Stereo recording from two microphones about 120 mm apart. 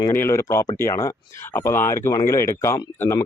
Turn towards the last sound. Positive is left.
turn(degrees=25)  # may be behind; listen again after turning